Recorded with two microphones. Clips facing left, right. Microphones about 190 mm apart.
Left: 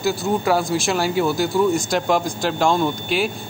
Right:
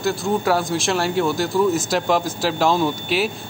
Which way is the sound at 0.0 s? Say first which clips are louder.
Even; centre (ahead or behind).